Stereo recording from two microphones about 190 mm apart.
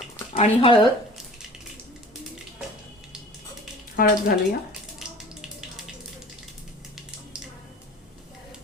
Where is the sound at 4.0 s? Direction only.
50° left (ahead or behind).